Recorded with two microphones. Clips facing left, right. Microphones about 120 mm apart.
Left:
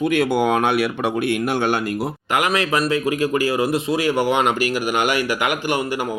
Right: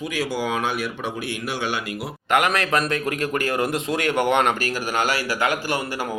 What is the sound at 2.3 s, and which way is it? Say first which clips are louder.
Speech: even; 10° left (ahead or behind).